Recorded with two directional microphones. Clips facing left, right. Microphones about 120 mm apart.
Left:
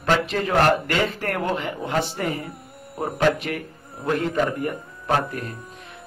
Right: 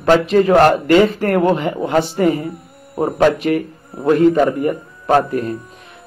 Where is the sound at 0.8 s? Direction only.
25° right (ahead or behind).